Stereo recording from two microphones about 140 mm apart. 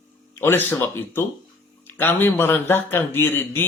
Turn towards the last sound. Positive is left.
turn(degrees=15)  # may be behind; listen again after turning